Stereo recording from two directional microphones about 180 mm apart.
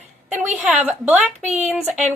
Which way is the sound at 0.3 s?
40° right (ahead or behind).